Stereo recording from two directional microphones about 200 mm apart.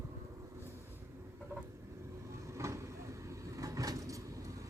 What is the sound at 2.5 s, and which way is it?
Vehicle, 15° right (ahead or behind).